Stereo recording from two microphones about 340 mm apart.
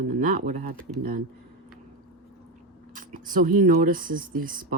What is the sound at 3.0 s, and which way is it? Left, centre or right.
Speech, right.